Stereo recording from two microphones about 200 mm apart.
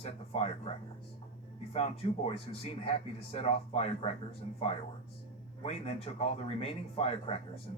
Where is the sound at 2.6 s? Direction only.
30° left (ahead or behind).